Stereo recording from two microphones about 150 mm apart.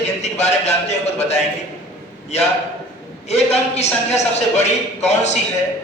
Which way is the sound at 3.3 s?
45° left (ahead or behind).